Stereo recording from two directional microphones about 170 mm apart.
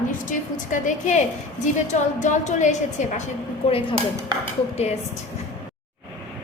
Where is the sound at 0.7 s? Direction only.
45° left (ahead or behind).